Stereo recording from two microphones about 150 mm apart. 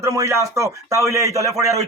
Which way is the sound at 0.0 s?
20° right (ahead or behind).